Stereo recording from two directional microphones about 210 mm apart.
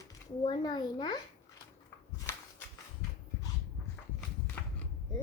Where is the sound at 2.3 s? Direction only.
10° left (ahead or behind).